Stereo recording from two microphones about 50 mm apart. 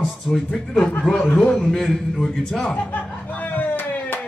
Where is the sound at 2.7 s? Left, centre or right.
Left.